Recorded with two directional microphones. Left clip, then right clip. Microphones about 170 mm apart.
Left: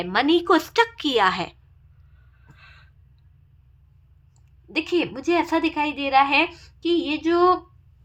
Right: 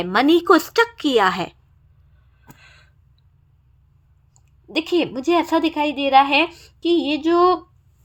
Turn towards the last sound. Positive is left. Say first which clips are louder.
# right 3 dB
turn(degrees=-25)  # may be behind; listen again after turning